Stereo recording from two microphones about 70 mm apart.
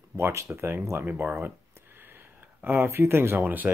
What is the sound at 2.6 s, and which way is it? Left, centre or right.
Speech, right.